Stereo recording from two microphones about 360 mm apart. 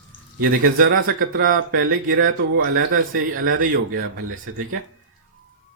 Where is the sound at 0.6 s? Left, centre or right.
Right.